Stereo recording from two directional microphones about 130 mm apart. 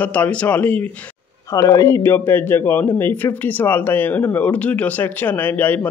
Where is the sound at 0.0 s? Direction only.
10° left (ahead or behind).